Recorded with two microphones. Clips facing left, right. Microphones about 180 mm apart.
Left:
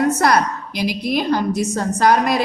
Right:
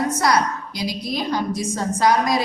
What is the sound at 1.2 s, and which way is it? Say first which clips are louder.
Speech: left 4 dB; 65° left (ahead or behind).